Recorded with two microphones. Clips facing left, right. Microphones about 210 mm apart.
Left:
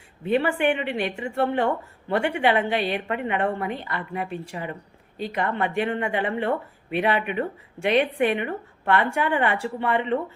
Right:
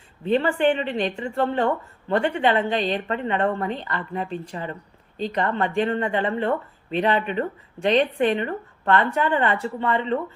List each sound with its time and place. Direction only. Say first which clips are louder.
0.3 s a woman's voice: right 2 dB; 10° left (ahead or behind)